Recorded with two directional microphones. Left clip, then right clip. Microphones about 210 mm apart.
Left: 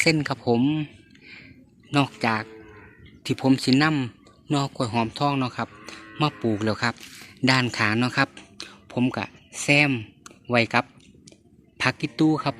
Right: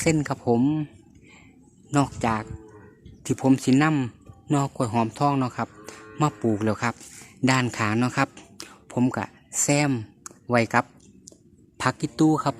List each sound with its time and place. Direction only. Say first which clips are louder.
0.0 s speech: left 2 dB; 10° right (ahead or behind)
1.9 s speech: left 1 dB; 5° right (ahead or behind)
11.8 s speech: even; 10° right (ahead or behind)